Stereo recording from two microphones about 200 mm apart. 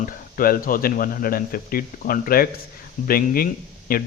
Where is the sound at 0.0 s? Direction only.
45° left (ahead or behind).